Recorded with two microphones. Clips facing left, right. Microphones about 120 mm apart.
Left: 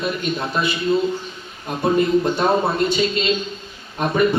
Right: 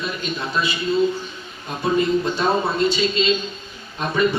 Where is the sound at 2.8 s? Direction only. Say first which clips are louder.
Even; 55° left (ahead or behind).